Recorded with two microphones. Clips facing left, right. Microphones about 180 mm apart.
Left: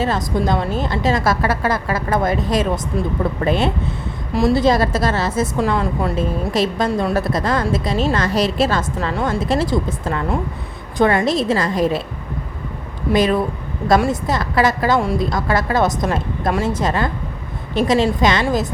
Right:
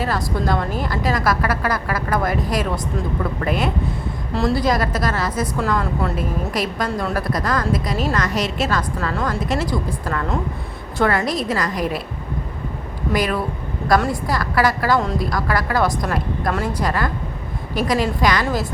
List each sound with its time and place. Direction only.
0.0 s a woman's voice: 20° left (ahead or behind)
4.3 s a woman's voice: 15° left (ahead or behind)
4.6 s a woman's voice: 25° left (ahead or behind)
5.5 s a woman's voice: 15° left (ahead or behind)
6.5 s a woman's voice: 25° left (ahead or behind)
13.1 s a woman's voice: 25° left (ahead or behind)